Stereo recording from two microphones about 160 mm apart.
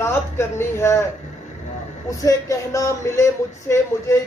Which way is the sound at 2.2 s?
20° left (ahead or behind).